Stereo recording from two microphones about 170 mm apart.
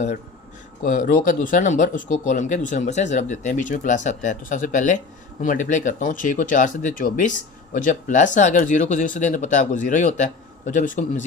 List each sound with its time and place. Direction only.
0.8 s speech: 50° left (ahead or behind)